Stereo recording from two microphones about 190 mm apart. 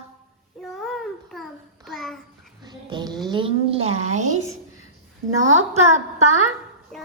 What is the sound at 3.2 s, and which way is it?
Speech, 25° right (ahead or behind).